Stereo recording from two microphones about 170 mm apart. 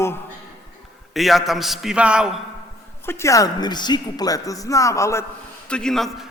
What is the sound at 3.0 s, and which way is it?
Speech, 15° left (ahead or behind).